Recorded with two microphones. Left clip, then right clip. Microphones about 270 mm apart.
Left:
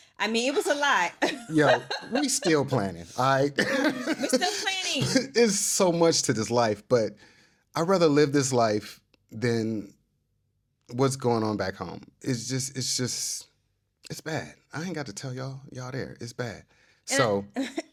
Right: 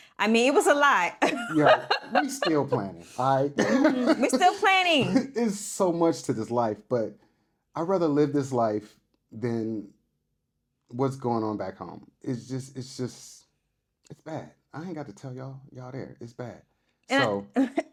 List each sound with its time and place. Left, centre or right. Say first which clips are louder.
0.0 s speech: right 4 dB; right
2.5 s a man's voice: left 1 dB; left
4.4 s speech: right 8 dB; right
5.1 s a man's voice: left 4 dB; left
10.8 s a man's voice: left 3 dB; left
17.5 s speech: right 6 dB; right